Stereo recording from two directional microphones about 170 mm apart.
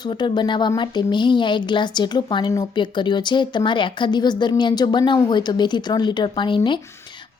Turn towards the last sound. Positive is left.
turn(degrees=30)  # may be behind; listen again after turning